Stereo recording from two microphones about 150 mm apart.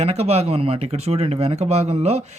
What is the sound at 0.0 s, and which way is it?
Speech, 45° right (ahead or behind).